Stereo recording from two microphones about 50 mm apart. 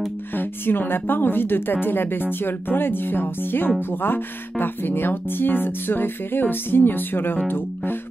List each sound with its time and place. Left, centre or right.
0.4 s a woman's voice: left
7.4 s music: left